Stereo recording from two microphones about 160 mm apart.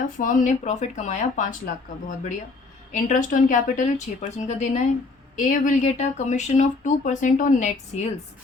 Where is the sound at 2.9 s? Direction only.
50° left (ahead or behind).